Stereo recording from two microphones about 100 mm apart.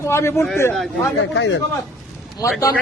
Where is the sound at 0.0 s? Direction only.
25° left (ahead or behind).